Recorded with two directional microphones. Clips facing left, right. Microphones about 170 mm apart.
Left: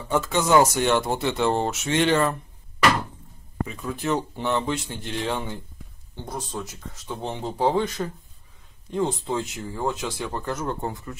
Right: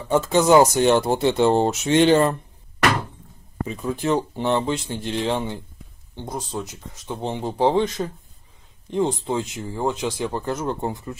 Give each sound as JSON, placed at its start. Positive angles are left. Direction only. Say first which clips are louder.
{"t": 0.1, "sound": "speech", "louder": "right 4 dB", "side_deg": -30}
{"t": 3.6, "sound": "speech", "louder": "right 4 dB", "side_deg": -25}